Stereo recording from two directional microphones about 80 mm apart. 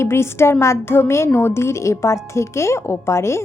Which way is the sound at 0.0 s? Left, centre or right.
Left.